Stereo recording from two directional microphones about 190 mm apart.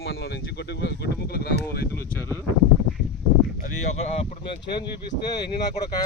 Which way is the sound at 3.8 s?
35° left (ahead or behind).